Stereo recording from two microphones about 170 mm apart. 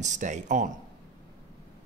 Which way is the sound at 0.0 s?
45° right (ahead or behind).